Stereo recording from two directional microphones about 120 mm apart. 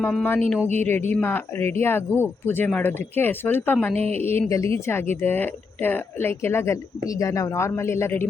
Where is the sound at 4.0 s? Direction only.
60° right (ahead or behind).